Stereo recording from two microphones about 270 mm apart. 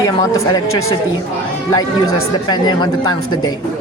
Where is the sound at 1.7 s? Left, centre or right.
Centre.